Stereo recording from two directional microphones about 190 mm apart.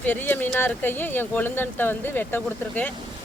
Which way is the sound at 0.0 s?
10° left (ahead or behind).